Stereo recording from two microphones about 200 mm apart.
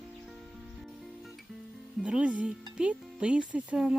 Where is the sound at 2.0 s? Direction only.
5° right (ahead or behind).